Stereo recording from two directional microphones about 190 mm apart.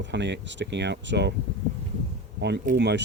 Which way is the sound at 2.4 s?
65° right (ahead or behind).